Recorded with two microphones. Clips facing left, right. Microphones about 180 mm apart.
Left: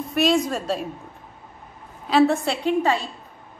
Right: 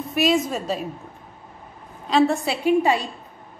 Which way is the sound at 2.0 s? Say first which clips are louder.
Left 1 dB; centre (ahead or behind).